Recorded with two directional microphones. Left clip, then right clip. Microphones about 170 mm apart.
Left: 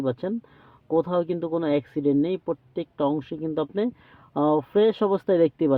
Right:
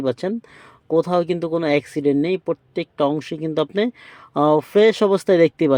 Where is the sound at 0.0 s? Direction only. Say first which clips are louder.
Right 5 dB; 15° right (ahead or behind).